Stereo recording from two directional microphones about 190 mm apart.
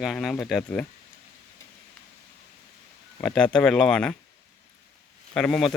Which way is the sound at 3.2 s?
5° left (ahead or behind).